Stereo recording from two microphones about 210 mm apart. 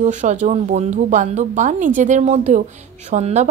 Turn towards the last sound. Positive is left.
turn(degrees=-35)  # may be behind; listen again after turning